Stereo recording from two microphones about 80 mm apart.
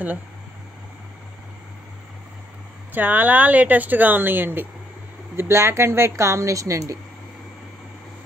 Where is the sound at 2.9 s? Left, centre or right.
Right.